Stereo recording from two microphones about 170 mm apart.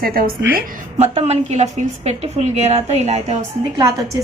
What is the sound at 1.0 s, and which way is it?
A woman's voice, 40° right (ahead or behind).